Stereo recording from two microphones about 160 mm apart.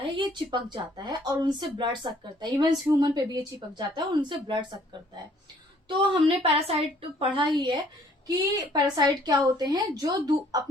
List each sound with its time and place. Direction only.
0.0 s speech: 30° right (ahead or behind)
5.9 s a woman's voice: 35° right (ahead or behind)